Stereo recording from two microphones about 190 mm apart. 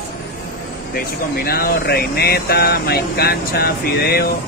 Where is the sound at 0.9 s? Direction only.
50° left (ahead or behind).